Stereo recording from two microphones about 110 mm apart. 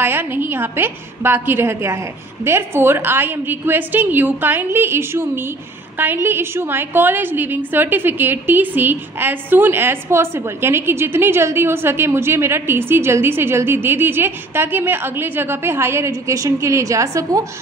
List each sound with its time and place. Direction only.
0.0 s a woman's voice: 20° right (ahead or behind)